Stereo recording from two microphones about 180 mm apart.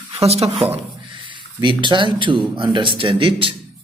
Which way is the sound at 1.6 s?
25° right (ahead or behind).